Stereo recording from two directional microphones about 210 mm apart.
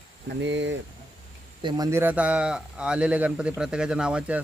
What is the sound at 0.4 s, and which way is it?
Speech, 60° right (ahead or behind).